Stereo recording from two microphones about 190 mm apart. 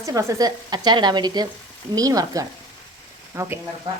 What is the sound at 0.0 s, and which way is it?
A woman's voice, 15° right (ahead or behind).